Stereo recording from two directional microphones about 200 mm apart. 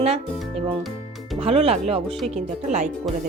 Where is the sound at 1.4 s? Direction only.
30° right (ahead or behind).